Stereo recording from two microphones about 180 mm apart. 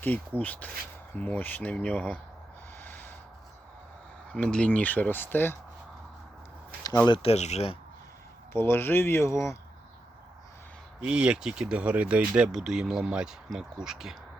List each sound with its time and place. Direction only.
0.0 s speech: 10° left (ahead or behind)
2.7 s snort: 10° left (ahead or behind)
4.3 s speech: 5° left (ahead or behind)
6.8 s speech: 20° left (ahead or behind); by 7.8 s 35° left (ahead or behind)
8.5 s speech: 10° left (ahead or behind)
11.0 s speech: 5° right (ahead or behind)